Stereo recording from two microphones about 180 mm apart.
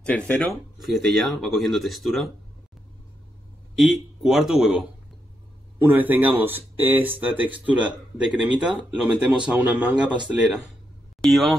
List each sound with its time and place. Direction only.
0.0 s speech: 5° left (ahead or behind)
3.7 s speech: centre (ahead or behind)
11.1 s speech: centre (ahead or behind)